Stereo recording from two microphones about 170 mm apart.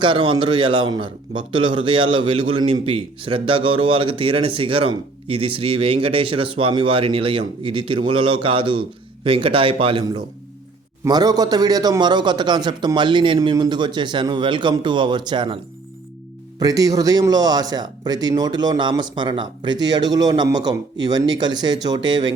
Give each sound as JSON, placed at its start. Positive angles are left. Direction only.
{"t": 0.0, "sound": "a man's voice", "side_deg": -30}
{"t": 16.6, "sound": "speech", "side_deg": -20}